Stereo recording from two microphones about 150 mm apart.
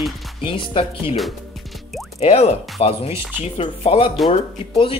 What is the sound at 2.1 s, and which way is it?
Speech, 45° left (ahead or behind).